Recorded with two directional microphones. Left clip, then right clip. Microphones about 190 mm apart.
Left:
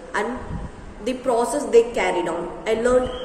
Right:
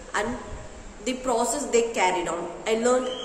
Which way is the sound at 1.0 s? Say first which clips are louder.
Left 4 dB; 20° right (ahead or behind).